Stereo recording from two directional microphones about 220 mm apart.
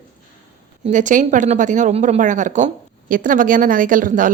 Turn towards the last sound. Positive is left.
turn(degrees=-35)  # may be behind; listen again after turning